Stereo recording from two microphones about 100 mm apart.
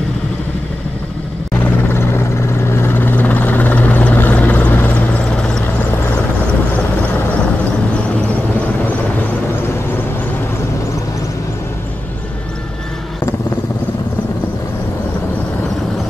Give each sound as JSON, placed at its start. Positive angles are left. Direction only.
{"t": 1.6, "sound": "vehicle", "side_deg": 25}
{"t": 2.7, "sound": "helicopter", "side_deg": 20}